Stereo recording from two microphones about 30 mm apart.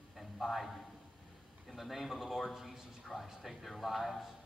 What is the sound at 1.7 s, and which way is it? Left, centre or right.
A man's voice, centre.